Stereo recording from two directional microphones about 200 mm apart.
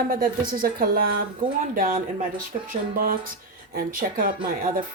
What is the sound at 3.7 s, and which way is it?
Speech, 45° right (ahead or behind).